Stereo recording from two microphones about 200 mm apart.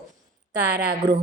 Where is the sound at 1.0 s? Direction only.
20° right (ahead or behind).